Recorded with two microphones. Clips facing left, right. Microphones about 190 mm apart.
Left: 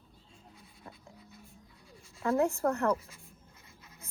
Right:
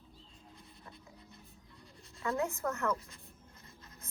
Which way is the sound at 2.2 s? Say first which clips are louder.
Left 6 dB; 30° left (ahead or behind).